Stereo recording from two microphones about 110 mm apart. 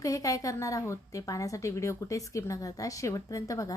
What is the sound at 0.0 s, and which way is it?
A woman's voice, 30° left (ahead or behind).